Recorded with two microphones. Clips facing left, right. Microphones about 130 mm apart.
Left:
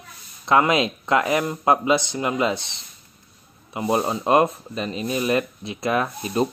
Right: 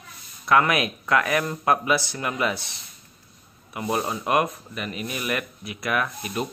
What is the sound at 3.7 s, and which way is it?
Speech, 25° left (ahead or behind).